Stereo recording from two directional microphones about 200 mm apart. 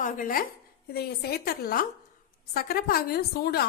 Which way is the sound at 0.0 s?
45° left (ahead or behind).